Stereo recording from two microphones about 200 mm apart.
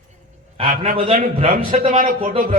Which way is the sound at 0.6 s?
45° right (ahead or behind).